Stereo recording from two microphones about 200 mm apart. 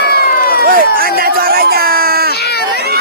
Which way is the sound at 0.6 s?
45° right (ahead or behind).